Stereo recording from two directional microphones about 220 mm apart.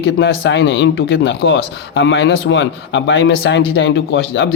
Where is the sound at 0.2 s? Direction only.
55° left (ahead or behind).